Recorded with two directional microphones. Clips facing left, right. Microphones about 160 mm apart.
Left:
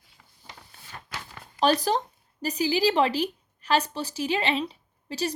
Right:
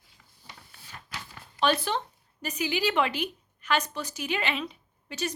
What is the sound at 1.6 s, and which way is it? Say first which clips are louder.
A woman's voice: left 4 dB; 40° left (ahead or behind).